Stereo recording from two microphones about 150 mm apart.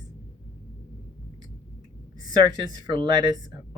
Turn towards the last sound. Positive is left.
turn(degrees=-30)  # may be behind; listen again after turning